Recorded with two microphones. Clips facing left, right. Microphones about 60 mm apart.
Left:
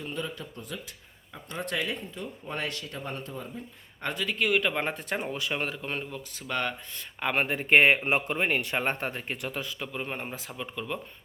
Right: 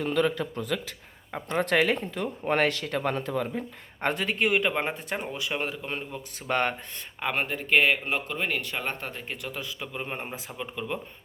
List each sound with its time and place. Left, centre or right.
0.0 s speech: right
1.3 s speech: right
4.0 s speech: right
4.4 s speech: centre
6.5 s speech: right
7.2 s speech: centre
7.7 s speech: left; by 11.0 s centre